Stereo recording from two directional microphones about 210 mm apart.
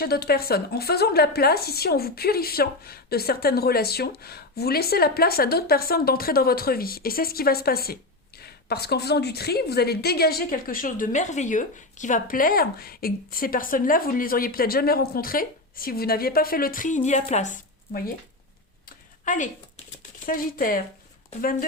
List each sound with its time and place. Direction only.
0.0 s a woman's voice: 50° left (ahead or behind)
18.9 s a sound: 40° left (ahead or behind)
20.2 s speech: 40° left (ahead or behind)